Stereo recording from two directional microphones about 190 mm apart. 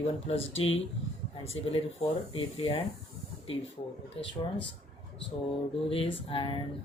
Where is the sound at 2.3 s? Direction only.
30° left (ahead or behind).